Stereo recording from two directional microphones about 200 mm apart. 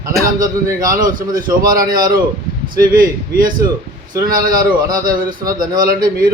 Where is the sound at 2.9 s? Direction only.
45° right (ahead or behind).